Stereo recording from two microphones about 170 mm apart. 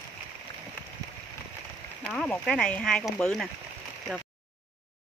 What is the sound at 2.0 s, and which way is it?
Speech, 5° left (ahead or behind).